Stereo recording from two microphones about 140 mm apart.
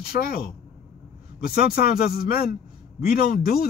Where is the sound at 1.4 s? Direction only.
90° left.